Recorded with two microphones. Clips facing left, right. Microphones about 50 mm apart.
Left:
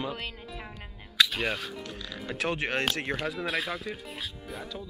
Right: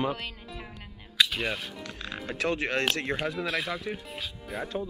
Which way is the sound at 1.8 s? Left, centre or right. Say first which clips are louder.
Right 1 dB; right.